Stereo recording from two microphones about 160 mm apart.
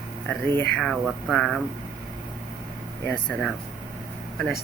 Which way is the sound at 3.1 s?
5° left (ahead or behind).